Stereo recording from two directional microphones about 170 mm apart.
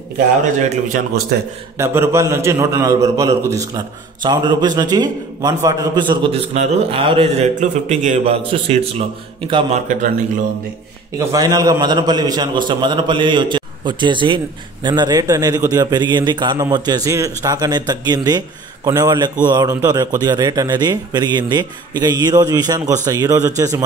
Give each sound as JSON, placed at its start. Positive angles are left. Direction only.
{"t": 0.7, "sound": "a man's voice", "side_deg": -50}
{"t": 1.8, "sound": "a man's voice", "side_deg": -15}
{"t": 7.6, "sound": "a man's voice", "side_deg": -45}
{"t": 8.4, "sound": "a man's voice", "side_deg": -35}
{"t": 11.1, "sound": "a man's voice", "side_deg": -20}